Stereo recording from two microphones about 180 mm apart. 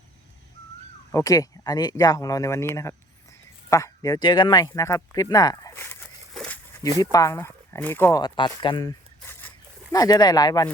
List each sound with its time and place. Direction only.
1.1 s speech: 20° left (ahead or behind)
6.3 s a sound: 5° left (ahead or behind)
7.0 s speech: 20° left (ahead or behind)
8.2 s speech: 25° left (ahead or behind)